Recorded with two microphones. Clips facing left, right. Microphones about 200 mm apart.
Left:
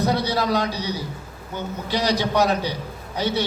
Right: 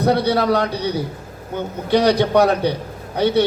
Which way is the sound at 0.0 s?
60° right (ahead or behind).